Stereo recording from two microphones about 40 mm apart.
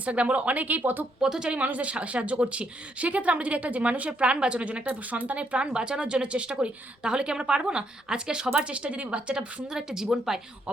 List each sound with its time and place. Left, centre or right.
0.0 s speech: right
1.2 s a woman's voice: centre
1.5 s speech: right
4.9 s speech: right
8.7 s speech: right
9.7 s a woman's voice: centre